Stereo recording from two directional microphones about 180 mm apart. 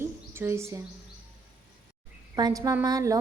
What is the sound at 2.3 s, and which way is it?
Speech, 20° right (ahead or behind).